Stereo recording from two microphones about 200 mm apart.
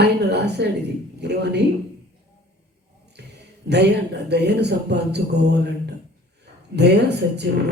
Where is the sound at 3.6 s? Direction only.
55° right (ahead or behind).